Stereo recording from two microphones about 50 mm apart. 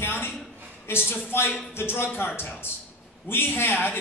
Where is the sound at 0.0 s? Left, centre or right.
Left.